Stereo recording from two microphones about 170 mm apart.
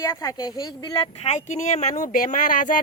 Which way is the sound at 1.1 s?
40° left (ahead or behind).